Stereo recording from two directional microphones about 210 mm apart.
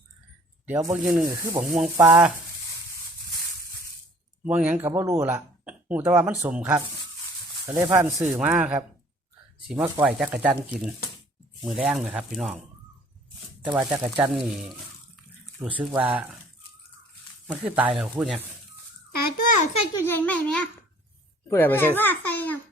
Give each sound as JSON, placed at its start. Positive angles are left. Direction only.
{"t": 0.6, "sound": "speech", "side_deg": -10}
{"t": 4.4, "sound": "speech", "side_deg": -5}
{"t": 13.7, "sound": "speech", "side_deg": -5}
{"t": 17.5, "sound": "speech", "side_deg": -5}
{"t": 19.5, "sound": "a sound", "side_deg": 30}
{"t": 20.1, "sound": "a sound", "side_deg": 10}
{"t": 21.5, "sound": "a child's voice", "side_deg": 10}